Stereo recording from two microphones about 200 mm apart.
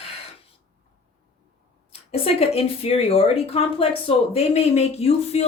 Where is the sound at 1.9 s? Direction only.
30° left (ahead or behind).